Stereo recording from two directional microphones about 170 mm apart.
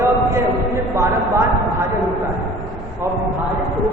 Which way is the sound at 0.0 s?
15° right (ahead or behind).